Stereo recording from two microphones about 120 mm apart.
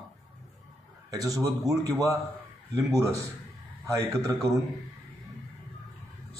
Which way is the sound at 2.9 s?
25° right (ahead or behind).